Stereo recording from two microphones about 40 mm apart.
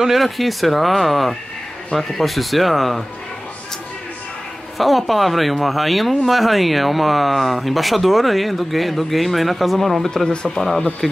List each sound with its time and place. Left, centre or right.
0.0 s speech: centre
4.7 s speech: centre